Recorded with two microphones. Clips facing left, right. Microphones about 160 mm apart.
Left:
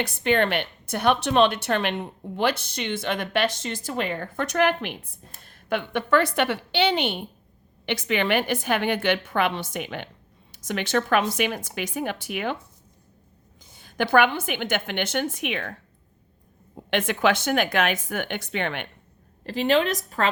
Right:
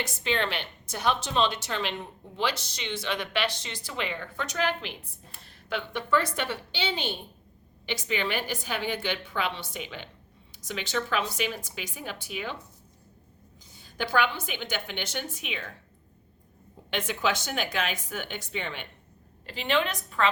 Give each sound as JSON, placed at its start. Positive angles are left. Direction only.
{"t": 0.0, "sound": "a woman's voice", "side_deg": 60}
{"t": 13.7, "sound": "a woman's voice", "side_deg": 55}
{"t": 16.9, "sound": "a woman's voice", "side_deg": 60}
{"t": 19.5, "sound": "a woman's voice", "side_deg": 40}